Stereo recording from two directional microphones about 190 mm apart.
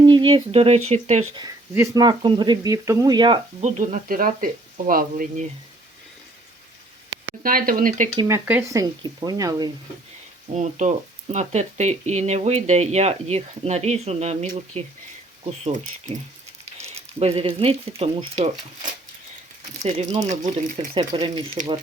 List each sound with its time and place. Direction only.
0.0 s speech: 25° right (ahead or behind)
1.7 s speech: 15° right (ahead or behind)
3.6 s speech: 40° right (ahead or behind)
7.4 s speech: 50° right (ahead or behind)
8.4 s speech: 15° right (ahead or behind)
10.5 s speech: 40° right (ahead or behind)
20.9 s speech: 20° right (ahead or behind)